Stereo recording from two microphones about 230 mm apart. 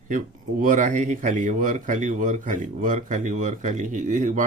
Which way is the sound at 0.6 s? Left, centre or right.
Right.